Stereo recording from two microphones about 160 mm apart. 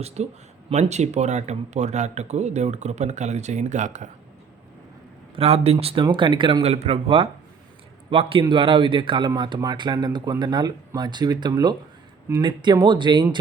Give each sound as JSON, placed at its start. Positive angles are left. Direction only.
{"t": 0.0, "sound": "speech", "side_deg": -40}
{"t": 5.4, "sound": "speech", "side_deg": -40}